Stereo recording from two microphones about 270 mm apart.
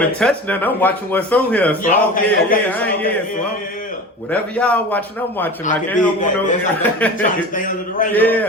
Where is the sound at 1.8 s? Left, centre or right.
Left.